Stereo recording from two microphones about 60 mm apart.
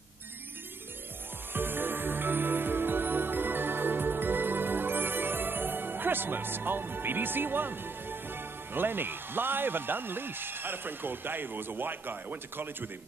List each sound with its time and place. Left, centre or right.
1.5 s music: right